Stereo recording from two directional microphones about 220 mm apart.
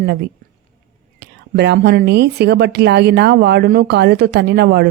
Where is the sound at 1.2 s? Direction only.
50° right (ahead or behind).